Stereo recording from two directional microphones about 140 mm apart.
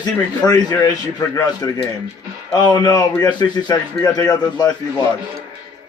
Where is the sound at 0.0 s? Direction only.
30° left (ahead or behind).